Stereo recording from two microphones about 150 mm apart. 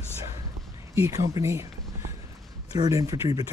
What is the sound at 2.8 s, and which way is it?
Speech, 20° right (ahead or behind).